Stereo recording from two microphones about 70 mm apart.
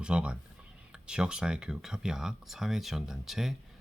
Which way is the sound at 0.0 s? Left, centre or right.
Centre.